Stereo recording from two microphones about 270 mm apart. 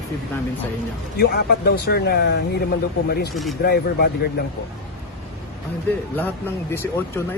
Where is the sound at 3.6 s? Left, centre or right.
Left.